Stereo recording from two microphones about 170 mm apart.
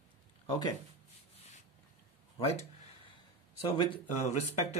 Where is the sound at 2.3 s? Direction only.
35° left (ahead or behind).